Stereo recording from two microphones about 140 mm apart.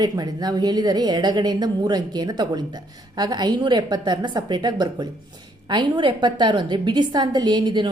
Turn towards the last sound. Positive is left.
turn(degrees=-30)  # may be behind; listen again after turning